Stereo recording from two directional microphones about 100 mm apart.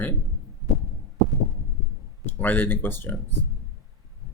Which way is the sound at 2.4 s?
15° left (ahead or behind).